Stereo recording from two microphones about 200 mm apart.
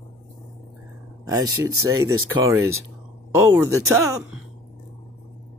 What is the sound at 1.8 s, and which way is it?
Speech, 90° right.